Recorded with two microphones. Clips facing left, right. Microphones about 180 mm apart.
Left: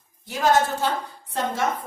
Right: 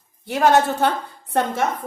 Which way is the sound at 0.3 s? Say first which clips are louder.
Right 4 dB; 60° right (ahead or behind).